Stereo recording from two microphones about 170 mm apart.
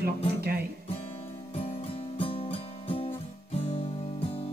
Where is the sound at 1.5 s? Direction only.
35° left (ahead or behind).